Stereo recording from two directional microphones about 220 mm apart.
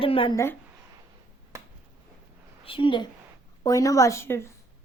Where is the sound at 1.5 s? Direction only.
15° right (ahead or behind).